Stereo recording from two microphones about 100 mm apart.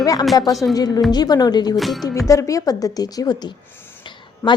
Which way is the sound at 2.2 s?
35° left (ahead or behind).